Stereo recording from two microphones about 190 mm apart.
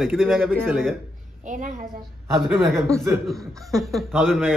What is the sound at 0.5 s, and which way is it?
Laughter, 10° right (ahead or behind).